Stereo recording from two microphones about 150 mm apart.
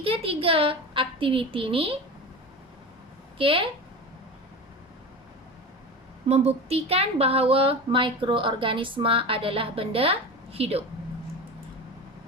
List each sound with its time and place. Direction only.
0.0 s a woman's voice: 40° right (ahead or behind)
3.3 s a woman's voice: 35° right (ahead or behind)
6.2 s a woman's voice: 45° right (ahead or behind)